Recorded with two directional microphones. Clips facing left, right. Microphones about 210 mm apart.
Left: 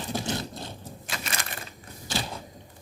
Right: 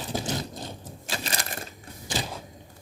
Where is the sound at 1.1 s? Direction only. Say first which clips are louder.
Right 3 dB; 35° right (ahead or behind).